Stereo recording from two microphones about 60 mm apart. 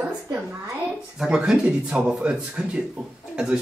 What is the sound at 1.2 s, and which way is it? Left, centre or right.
Speech, centre.